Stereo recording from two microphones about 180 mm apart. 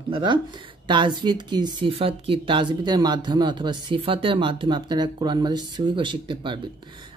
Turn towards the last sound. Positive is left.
turn(degrees=-25)  # may be behind; listen again after turning